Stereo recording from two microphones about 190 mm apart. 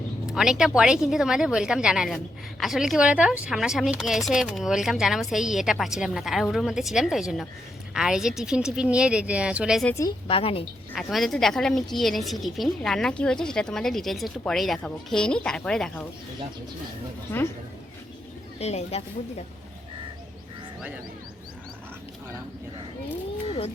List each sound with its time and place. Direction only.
0.3 s a woman's voice: 5° right (ahead or behind)
9.9 s a woman's voice: 20° left (ahead or behind)
10.9 s a woman's voice: centre (ahead or behind)
18.6 s speech: 35° left (ahead or behind)